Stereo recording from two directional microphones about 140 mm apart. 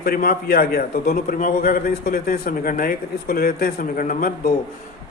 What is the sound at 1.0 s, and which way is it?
A man's voice, 65° left (ahead or behind).